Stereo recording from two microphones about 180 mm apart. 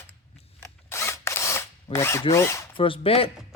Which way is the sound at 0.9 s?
15° left (ahead or behind).